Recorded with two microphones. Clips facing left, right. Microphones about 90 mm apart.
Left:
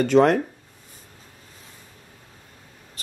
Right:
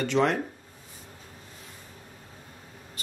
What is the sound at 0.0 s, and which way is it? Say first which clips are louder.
Speech: left 8 dB; 50° left (ahead or behind).